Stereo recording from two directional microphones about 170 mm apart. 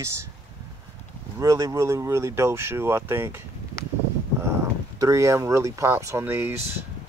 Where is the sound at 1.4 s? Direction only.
20° right (ahead or behind).